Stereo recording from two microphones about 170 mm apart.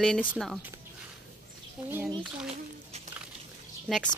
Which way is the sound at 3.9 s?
5° left (ahead or behind).